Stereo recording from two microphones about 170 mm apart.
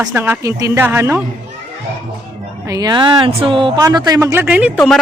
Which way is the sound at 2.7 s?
20° right (ahead or behind).